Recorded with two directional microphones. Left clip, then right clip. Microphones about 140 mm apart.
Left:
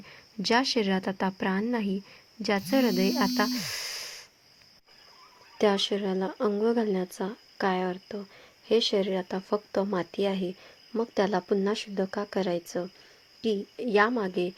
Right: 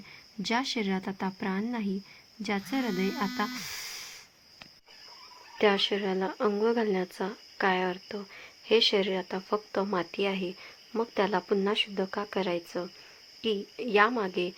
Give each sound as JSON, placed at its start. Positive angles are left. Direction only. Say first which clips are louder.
{"t": 0.4, "sound": "a woman's voice", "louder": "left 5 dB", "side_deg": 25}
{"t": 5.5, "sound": "speech", "louder": "even", "side_deg": 35}